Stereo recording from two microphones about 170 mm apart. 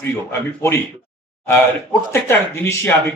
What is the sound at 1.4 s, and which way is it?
Speech, 15° left (ahead or behind).